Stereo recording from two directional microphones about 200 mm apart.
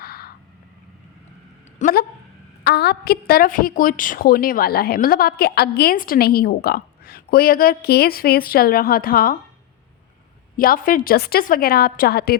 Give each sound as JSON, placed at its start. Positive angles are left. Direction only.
{"t": 0.0, "sound": "vehicle", "side_deg": 50}
{"t": 1.8, "sound": "a sound", "side_deg": 50}
{"t": 2.6, "sound": "a woman's voice", "side_deg": 55}
{"t": 10.6, "sound": "a woman's voice", "side_deg": 45}